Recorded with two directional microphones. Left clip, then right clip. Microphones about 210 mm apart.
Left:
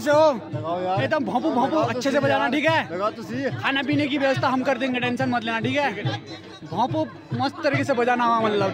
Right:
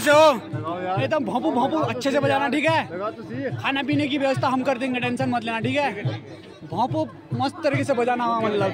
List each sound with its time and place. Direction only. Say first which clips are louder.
0.0 s a man's voice: right 3 dB; 5° left (ahead or behind)
0.7 s a sound: left 2 dB; 65° left (ahead or behind)
0.9 s a man's voice: right 2 dB; centre (ahead or behind)
2.9 s speech: left 3 dB; 65° left (ahead or behind)
3.6 s a man's voice: even; centre (ahead or behind)